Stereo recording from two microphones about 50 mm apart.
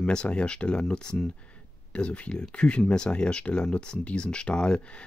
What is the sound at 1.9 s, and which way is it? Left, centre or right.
Speech, left.